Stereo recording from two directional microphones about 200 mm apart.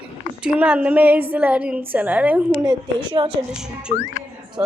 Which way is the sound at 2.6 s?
25° right (ahead or behind).